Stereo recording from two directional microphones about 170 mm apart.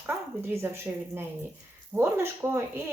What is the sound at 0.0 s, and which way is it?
Speech, 15° right (ahead or behind).